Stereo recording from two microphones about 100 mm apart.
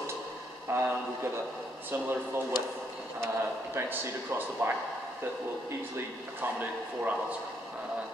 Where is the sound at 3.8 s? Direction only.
20° right (ahead or behind).